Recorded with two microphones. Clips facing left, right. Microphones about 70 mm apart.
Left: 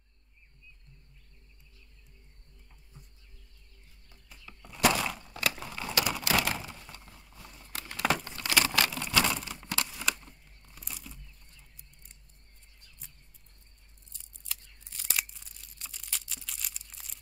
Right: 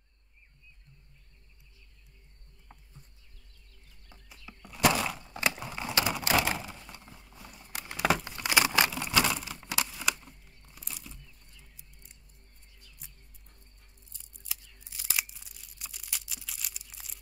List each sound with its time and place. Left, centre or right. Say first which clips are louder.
4.3 s a sound: right 1 dB; centre
5.6 s typing: right 1 dB; centre
6.6 s a sound: right 1 dB; centre
9.8 s tearing: right 1 dB; centre
11.7 s music: right 1 dB; centre
14.1 s tearing: left 1 dB; centre